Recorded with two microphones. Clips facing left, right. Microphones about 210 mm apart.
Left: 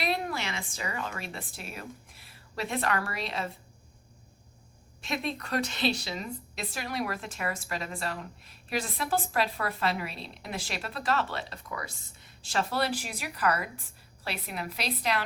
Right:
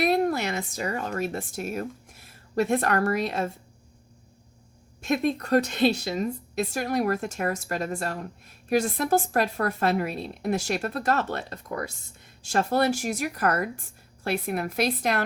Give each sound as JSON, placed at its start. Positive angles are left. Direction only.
{"t": 0.0, "sound": "a woman's voice", "side_deg": -45}
{"t": 5.0, "sound": "a woman's voice", "side_deg": -50}